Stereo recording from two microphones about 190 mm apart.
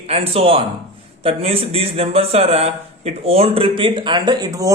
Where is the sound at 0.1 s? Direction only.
30° right (ahead or behind).